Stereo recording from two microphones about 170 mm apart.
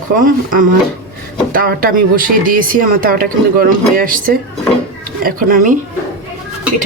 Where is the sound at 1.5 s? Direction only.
60° right (ahead or behind).